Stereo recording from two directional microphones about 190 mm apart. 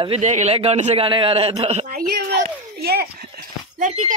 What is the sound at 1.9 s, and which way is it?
Speech, 60° right (ahead or behind).